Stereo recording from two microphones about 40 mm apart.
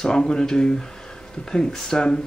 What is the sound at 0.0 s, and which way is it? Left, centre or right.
Speech, centre.